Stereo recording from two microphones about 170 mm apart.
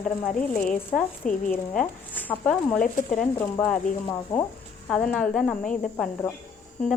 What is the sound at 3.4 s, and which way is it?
Speech, 10° left (ahead or behind).